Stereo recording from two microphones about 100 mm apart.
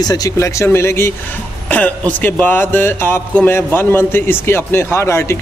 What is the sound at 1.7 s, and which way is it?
Speech, 15° left (ahead or behind).